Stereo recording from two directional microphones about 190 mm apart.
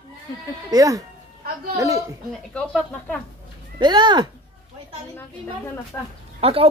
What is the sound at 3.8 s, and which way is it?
Speech, 25° right (ahead or behind).